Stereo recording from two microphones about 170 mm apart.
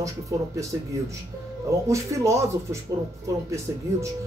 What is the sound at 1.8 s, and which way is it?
Speech, 15° right (ahead or behind).